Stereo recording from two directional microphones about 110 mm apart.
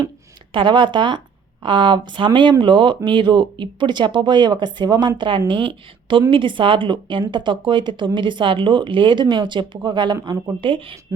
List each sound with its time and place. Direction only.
0.5 s speech: 45° right (ahead or behind)